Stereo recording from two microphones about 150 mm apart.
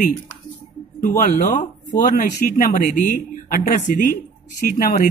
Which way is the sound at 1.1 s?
65° left (ahead or behind).